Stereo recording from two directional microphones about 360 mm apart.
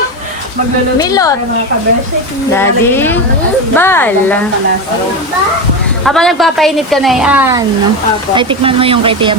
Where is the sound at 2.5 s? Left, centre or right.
Centre.